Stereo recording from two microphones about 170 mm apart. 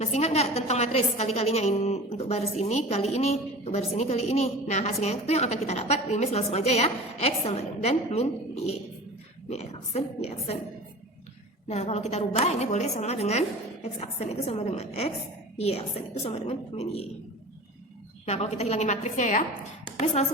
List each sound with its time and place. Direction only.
0.0 s a woman's voice: 40° left (ahead or behind)
11.7 s a woman's voice: 40° left (ahead or behind)
18.3 s a woman's voice: 40° left (ahead or behind)